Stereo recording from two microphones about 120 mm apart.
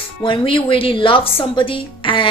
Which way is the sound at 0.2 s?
45° left (ahead or behind).